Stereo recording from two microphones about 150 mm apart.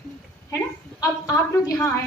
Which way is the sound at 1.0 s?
20° left (ahead or behind).